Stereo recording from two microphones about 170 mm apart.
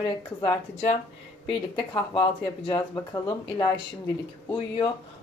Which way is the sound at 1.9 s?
30° left (ahead or behind).